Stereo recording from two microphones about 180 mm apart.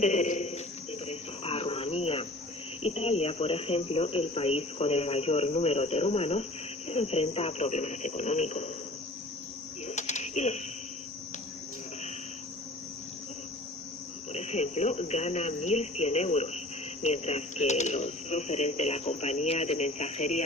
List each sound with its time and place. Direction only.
0.0 s a man's voice: 40° left (ahead or behind)
1.0 s cricket: 35° left (ahead or behind)
2.8 s speech: 35° left (ahead or behind)
9.8 s a sound: 40° left (ahead or behind)
14.3 s speech: 40° left (ahead or behind)